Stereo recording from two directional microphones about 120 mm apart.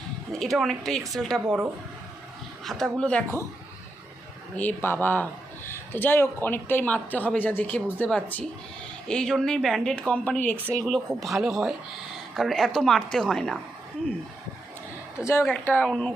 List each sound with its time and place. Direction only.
0.3 s speech: centre (ahead or behind)
2.6 s speech: centre (ahead or behind)
4.5 s speech: 15° left (ahead or behind)
11.2 s speech: centre (ahead or behind)
15.2 s speech: 20° left (ahead or behind)